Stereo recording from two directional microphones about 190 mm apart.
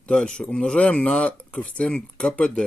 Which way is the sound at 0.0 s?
5° left (ahead or behind).